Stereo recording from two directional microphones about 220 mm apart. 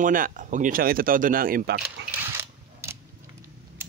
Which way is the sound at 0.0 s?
35° right (ahead or behind).